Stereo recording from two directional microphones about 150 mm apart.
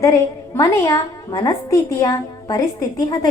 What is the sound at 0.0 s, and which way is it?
Speech, 20° left (ahead or behind).